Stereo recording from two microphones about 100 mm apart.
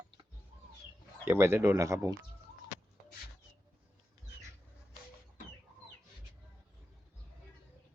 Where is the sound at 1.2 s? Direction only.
25° right (ahead or behind).